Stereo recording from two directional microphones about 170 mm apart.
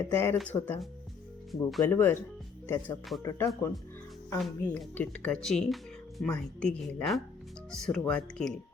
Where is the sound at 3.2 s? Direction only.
20° left (ahead or behind).